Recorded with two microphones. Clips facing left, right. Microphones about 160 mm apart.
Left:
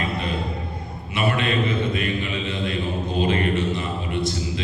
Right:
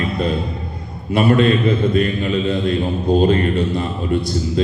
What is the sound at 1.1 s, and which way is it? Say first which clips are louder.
A man's voice: right 9 dB; 40° right (ahead or behind).